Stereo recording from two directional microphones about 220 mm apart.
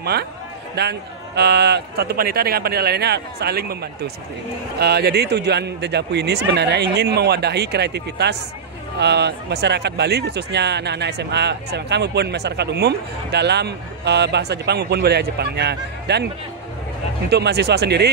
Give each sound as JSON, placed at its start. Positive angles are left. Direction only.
{"t": 0.0, "sound": "a man's voice", "side_deg": -45}
{"t": 17.3, "sound": "speech", "side_deg": -50}